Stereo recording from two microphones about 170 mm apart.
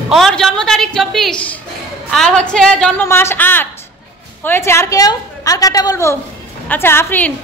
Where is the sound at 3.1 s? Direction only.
15° left (ahead or behind).